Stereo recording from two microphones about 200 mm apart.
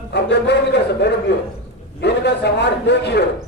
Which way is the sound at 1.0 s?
60° left (ahead or behind).